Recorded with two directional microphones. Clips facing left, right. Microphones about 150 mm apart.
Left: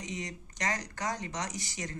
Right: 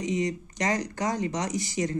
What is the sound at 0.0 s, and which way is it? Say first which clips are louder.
Speech: right 12 dB; 15° right (ahead or behind).